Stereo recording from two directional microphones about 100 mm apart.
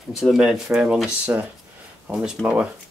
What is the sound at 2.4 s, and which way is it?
Speech, 10° left (ahead or behind).